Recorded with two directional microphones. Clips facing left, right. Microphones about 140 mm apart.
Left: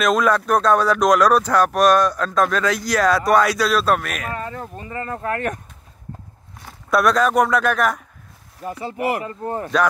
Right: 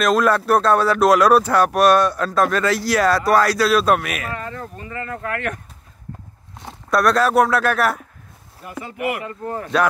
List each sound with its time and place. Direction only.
0.0 s speech: centre (ahead or behind)
4.4 s speech: 20° left (ahead or behind)
6.6 s a sound: 25° right (ahead or behind)
6.9 s speech: centre (ahead or behind)
8.8 s speech: 35° left (ahead or behind)